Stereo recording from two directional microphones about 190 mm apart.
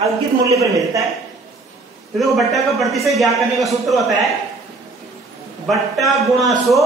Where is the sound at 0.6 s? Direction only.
15° right (ahead or behind).